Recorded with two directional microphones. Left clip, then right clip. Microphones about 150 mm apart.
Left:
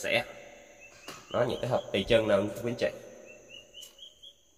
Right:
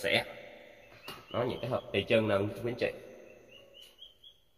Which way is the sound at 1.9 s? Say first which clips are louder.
Left 2 dB; 25° left (ahead or behind).